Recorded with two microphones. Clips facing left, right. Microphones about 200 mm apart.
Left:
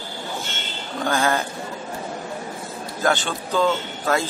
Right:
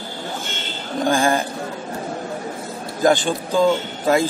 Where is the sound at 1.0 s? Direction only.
15° right (ahead or behind).